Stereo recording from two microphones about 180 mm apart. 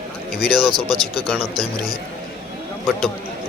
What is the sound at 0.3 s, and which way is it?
Speech, 5° right (ahead or behind).